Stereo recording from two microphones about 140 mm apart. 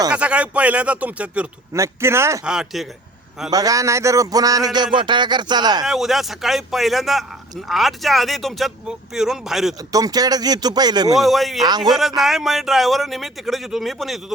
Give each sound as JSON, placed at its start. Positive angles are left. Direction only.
{"t": 0.1, "sound": "speech", "side_deg": -10}
{"t": 1.7, "sound": "speech", "side_deg": -20}
{"t": 2.4, "sound": "a man's voice", "side_deg": -5}
{"t": 3.5, "sound": "speech", "side_deg": -25}
{"t": 5.8, "sound": "a man's voice", "side_deg": 0}
{"t": 9.9, "sound": "speech", "side_deg": -25}
{"t": 11.2, "sound": "a man's voice", "side_deg": 0}